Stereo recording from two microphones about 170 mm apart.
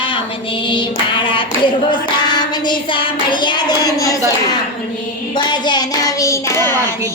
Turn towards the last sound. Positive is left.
turn(degrees=15)  # may be behind; listen again after turning